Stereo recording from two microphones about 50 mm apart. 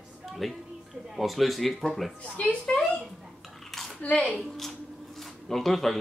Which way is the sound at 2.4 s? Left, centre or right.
Left.